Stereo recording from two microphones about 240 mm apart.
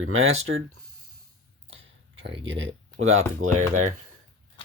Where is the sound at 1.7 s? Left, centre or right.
Right.